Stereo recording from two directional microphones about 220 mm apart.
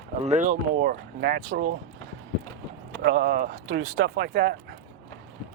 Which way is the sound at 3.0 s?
60° right (ahead or behind).